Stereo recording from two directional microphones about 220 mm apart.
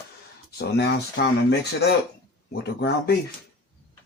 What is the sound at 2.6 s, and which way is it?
Speech, 45° left (ahead or behind).